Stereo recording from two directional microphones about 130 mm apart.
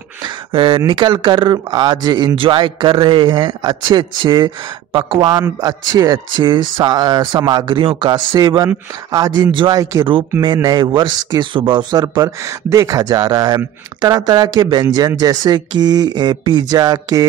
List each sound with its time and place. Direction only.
0.2 s speech: 40° right (ahead or behind)